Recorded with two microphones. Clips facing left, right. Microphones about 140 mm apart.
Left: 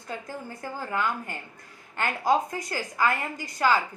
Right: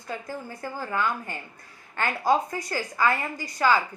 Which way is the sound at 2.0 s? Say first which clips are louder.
Right 1 dB; 15° left (ahead or behind).